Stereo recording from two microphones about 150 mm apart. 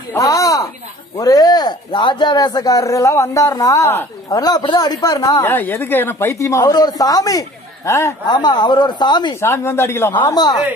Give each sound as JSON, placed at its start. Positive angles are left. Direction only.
{"t": 0.1, "sound": "a sound", "side_deg": 20}
{"t": 1.1, "sound": "speech", "side_deg": 25}
{"t": 9.3, "sound": "speech", "side_deg": 15}
{"t": 10.3, "sound": "speech", "side_deg": 30}